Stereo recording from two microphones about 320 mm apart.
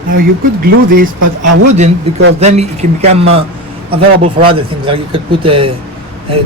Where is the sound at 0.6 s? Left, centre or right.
Right.